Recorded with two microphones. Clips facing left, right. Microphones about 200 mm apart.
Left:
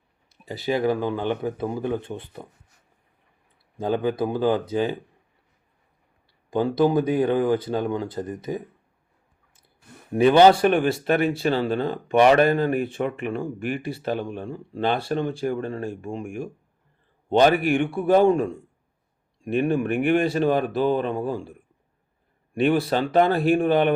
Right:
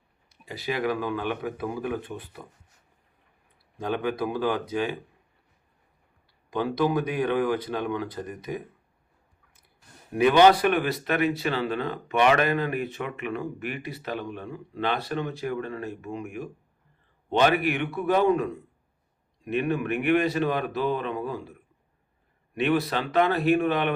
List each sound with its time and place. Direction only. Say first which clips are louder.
0.4 s speech: left 5 dB; 30° left (ahead or behind)
3.8 s speech: left 4 dB; 30° left (ahead or behind)
6.5 s speech: left 5 dB; 30° left (ahead or behind)
10.2 s speech: left 3 dB; 30° left (ahead or behind)
17.2 s a man's voice: left 4 dB; 35° left (ahead or behind)
19.5 s speech: left 4 dB; 30° left (ahead or behind)
22.5 s speech: left 4 dB; 30° left (ahead or behind)